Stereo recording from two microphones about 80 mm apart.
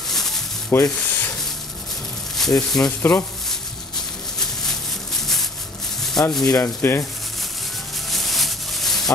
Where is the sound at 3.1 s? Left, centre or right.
Centre.